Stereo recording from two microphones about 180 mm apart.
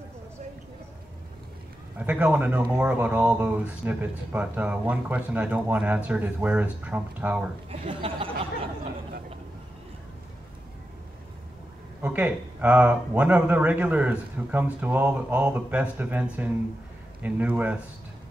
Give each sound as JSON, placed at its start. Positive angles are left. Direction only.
{"t": 2.0, "sound": "speech", "side_deg": -10}
{"t": 7.7, "sound": "speech", "side_deg": -30}
{"t": 12.0, "sound": "speech", "side_deg": -10}